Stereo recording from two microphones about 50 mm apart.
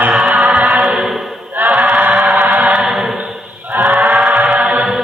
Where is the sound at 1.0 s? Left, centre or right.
Centre.